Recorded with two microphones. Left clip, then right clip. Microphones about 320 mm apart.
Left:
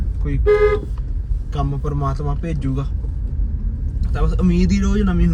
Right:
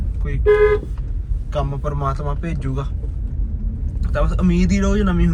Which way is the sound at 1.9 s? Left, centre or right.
Right.